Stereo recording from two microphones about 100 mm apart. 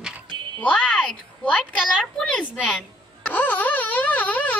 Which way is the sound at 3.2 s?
15° left (ahead or behind).